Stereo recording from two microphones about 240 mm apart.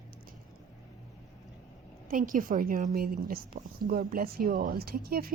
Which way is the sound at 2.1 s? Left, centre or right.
Right.